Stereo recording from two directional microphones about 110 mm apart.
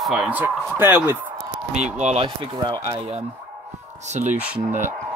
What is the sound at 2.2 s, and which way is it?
Speech, 40° right (ahead or behind).